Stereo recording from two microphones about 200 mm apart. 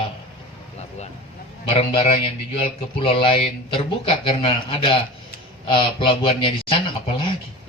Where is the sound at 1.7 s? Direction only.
25° left (ahead or behind).